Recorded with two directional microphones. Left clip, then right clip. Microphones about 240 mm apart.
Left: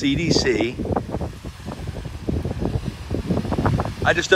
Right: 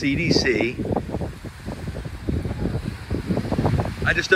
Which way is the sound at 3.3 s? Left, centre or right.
Right.